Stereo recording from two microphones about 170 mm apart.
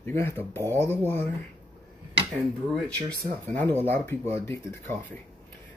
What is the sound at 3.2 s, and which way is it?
Speech, 50° right (ahead or behind).